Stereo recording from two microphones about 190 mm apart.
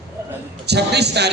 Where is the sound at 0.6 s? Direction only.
60° right (ahead or behind).